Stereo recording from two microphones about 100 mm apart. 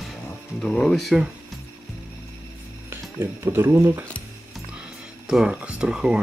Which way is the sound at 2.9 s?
25° right (ahead or behind).